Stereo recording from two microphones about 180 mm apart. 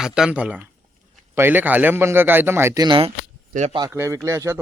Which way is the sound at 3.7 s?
15° right (ahead or behind).